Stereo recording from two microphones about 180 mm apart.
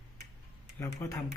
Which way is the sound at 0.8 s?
15° left (ahead or behind).